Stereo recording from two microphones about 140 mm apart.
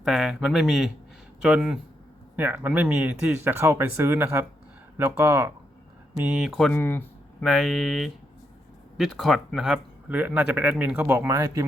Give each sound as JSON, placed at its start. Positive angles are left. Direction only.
{"t": 0.0, "sound": "speech", "side_deg": 0}
{"t": 6.1, "sound": "speech", "side_deg": -5}
{"t": 6.7, "sound": "speech", "side_deg": 15}
{"t": 7.4, "sound": "speech", "side_deg": 0}